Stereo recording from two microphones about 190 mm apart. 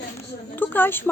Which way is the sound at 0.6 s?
10° left (ahead or behind).